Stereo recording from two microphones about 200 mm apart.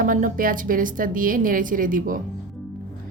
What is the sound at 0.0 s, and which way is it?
A woman's voice, 45° right (ahead or behind).